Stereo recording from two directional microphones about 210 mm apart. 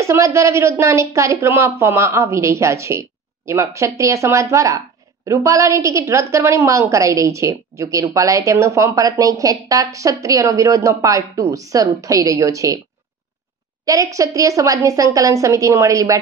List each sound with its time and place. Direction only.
0.0 s a woman's voice: 15° right (ahead or behind)
13.8 s a woman's voice: 15° right (ahead or behind)